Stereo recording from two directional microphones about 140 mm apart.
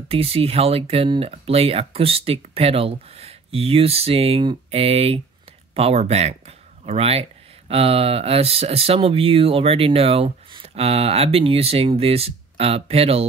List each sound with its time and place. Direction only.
0.1 s speech: 45° right (ahead or behind)